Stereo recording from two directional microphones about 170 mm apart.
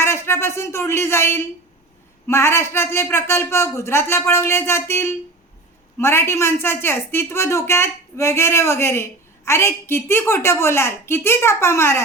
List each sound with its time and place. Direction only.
0.0 s speech: 15° left (ahead or behind)